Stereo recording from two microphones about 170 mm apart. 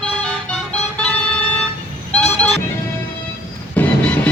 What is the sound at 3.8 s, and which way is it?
Music, 10° left (ahead or behind).